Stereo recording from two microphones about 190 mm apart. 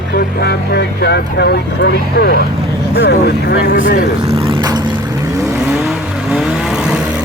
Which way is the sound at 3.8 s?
45° left (ahead or behind).